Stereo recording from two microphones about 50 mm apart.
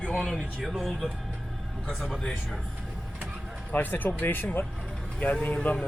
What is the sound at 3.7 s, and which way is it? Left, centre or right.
Speech, left.